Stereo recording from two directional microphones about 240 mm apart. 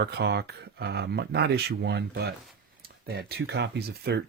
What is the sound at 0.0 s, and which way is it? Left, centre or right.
Speech, right.